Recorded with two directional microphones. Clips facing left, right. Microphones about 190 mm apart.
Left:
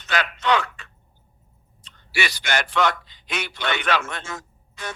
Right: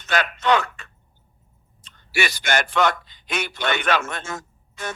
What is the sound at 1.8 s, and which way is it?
A man's voice, 45° right (ahead or behind).